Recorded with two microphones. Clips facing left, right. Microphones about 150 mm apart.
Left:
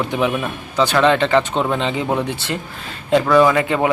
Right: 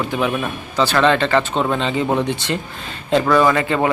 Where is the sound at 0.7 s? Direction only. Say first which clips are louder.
Left 1 dB; 15° left (ahead or behind).